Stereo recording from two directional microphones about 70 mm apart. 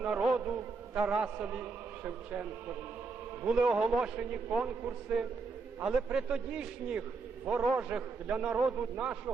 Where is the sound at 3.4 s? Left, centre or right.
Centre.